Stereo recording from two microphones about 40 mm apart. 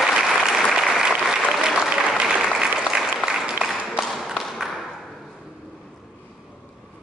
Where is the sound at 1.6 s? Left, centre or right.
Right.